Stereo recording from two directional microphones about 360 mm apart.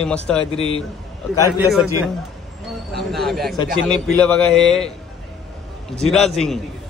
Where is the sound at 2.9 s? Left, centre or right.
Centre.